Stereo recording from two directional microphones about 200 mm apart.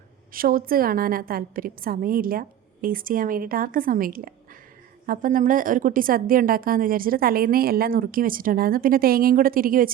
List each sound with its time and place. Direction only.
0.3 s a woman's voice: 45° right (ahead or behind)